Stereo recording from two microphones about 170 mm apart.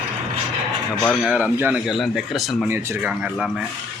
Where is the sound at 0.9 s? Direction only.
10° left (ahead or behind).